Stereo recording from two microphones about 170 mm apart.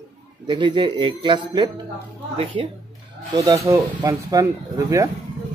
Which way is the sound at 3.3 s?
20° right (ahead or behind).